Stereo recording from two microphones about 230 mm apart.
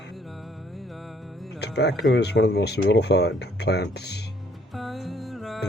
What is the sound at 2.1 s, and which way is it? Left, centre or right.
Speech, left.